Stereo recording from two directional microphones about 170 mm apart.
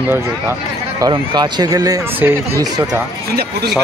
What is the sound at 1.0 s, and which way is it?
Speech, 25° right (ahead or behind).